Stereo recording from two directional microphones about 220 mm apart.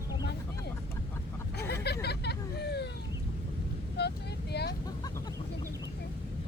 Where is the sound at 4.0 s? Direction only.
50° left (ahead or behind).